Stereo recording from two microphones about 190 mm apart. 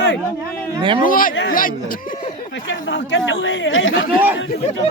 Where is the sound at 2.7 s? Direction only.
75° left (ahead or behind).